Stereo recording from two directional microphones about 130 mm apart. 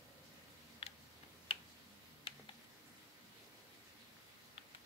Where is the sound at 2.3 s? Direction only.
45° left (ahead or behind).